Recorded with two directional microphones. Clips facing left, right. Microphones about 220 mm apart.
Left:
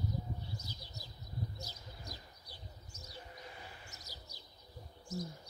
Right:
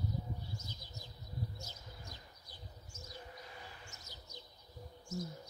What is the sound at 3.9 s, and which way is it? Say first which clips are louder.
Bird: left 1 dB; 35° left (ahead or behind).